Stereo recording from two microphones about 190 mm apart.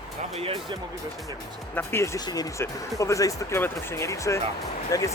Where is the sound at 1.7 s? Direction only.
15° left (ahead or behind).